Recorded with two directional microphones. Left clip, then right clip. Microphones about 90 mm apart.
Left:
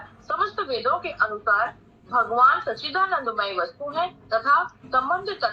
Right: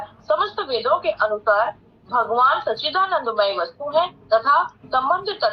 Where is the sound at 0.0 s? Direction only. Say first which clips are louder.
Right 5 dB; 35° right (ahead or behind).